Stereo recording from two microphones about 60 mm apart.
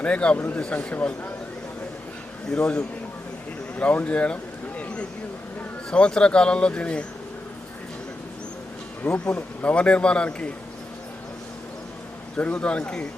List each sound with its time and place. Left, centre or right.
0.0 s a man's voice: centre
0.3 s speech: left
0.6 s a man's voice: centre
2.6 s a man's voice: left
5.9 s speech: centre
9.0 s a man's voice: centre
12.4 s a man's voice: left